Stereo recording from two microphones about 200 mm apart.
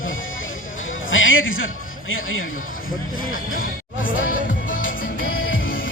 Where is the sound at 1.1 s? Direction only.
75° left (ahead or behind).